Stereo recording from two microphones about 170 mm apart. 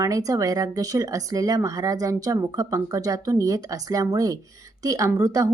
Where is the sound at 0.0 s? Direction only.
20° right (ahead or behind).